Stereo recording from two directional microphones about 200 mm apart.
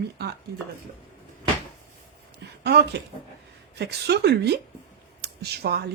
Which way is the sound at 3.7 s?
55° right (ahead or behind).